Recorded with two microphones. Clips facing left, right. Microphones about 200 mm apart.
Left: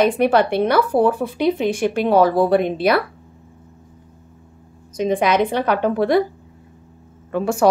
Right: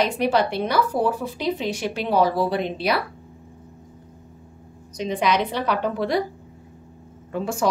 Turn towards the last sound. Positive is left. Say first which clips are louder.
# left 6 dB
turn(degrees=65)  # may be behind; listen again after turning